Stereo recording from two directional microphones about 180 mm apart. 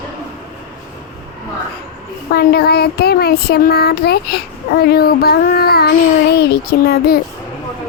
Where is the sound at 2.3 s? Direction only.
60° left (ahead or behind).